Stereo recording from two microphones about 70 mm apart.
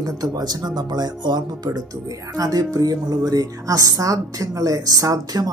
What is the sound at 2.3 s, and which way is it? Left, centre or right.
Speech, right.